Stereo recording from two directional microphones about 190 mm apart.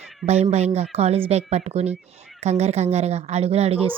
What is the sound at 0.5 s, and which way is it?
A woman's voice, 35° right (ahead or behind).